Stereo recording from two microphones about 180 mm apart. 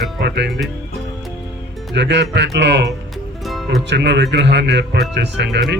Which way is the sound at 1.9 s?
70° right (ahead or behind).